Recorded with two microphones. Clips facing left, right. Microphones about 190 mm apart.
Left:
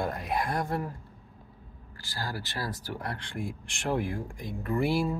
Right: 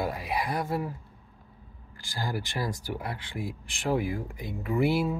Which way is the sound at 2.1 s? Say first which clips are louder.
Right 3 dB; 15° right (ahead or behind).